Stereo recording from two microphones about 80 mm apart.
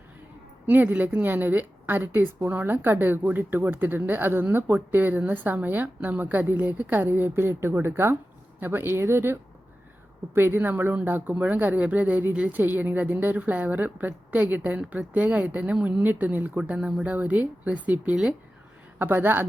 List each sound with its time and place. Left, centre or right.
0.7 s a woman's voice: right
18.9 s a woman's voice: right